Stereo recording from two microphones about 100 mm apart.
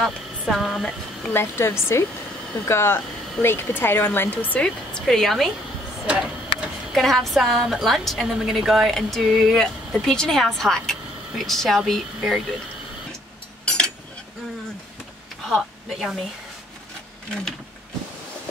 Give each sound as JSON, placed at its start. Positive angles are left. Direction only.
{"t": 0.0, "sound": "a woman's voice", "side_deg": 0}
{"t": 1.3, "sound": "speech", "side_deg": 25}
{"t": 4.6, "sound": "a woman's voice", "side_deg": 10}
{"t": 6.0, "sound": "vehicle", "side_deg": -10}
{"t": 6.9, "sound": "a woman's voice", "side_deg": 0}
{"t": 15.5, "sound": "a woman's voice", "side_deg": 0}